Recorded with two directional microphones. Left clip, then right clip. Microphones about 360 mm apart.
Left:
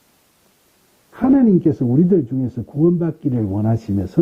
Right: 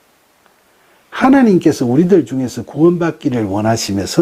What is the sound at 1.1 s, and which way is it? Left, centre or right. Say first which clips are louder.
Speech: right 5 dB; centre.